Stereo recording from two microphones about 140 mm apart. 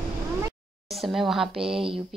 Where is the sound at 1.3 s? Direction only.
5° right (ahead or behind).